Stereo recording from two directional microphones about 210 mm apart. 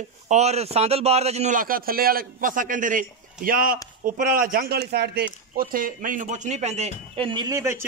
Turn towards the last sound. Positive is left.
turn(degrees=-15)  # may be behind; listen again after turning